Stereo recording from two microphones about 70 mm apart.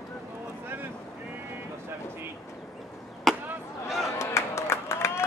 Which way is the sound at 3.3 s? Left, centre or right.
Centre.